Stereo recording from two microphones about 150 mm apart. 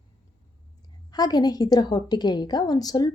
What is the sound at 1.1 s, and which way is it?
A woman's voice, 25° left (ahead or behind).